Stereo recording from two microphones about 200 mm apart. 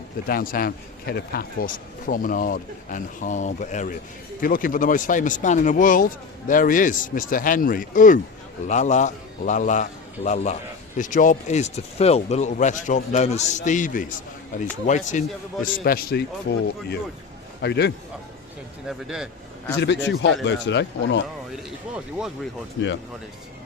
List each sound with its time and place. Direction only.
0.3 s a man's voice: 45° left (ahead or behind)
18.9 s speech: centre (ahead or behind)
19.8 s speech: 60° left (ahead or behind)